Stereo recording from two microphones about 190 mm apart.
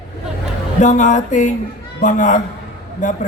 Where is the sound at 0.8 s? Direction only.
40° left (ahead or behind).